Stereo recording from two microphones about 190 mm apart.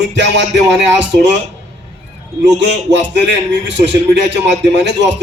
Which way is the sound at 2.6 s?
65° right (ahead or behind).